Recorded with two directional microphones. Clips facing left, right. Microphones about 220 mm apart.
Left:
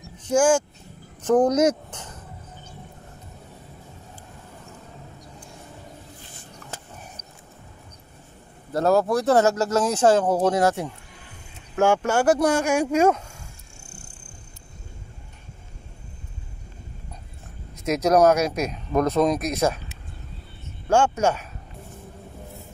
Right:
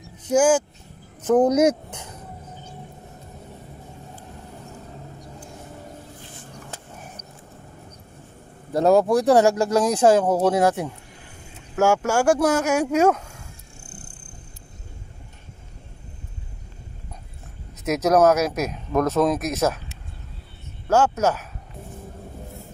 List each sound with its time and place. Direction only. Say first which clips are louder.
0.3 s speech: right 1 dB; 5° right (ahead or behind)
8.7 s speech: right 3 dB; 15° right (ahead or behind)
17.8 s speech: even; 5° right (ahead or behind)
20.9 s speech: right 1 dB; 5° right (ahead or behind)